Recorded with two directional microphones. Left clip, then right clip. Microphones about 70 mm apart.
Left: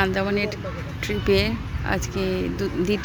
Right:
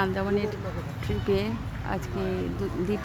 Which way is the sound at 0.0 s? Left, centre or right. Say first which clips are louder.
Left 4 dB; centre.